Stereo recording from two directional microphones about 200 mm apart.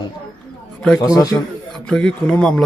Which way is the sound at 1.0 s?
20° left (ahead or behind).